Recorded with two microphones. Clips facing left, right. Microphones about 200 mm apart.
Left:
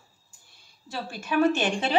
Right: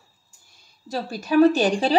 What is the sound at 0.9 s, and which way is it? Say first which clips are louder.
Speech: right 7 dB; 40° right (ahead or behind).